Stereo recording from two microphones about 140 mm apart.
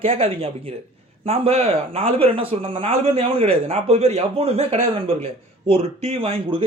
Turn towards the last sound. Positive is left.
turn(degrees=-40)  # may be behind; listen again after turning